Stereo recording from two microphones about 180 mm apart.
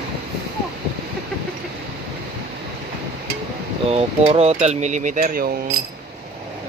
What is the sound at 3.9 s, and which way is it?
Speech, 35° right (ahead or behind).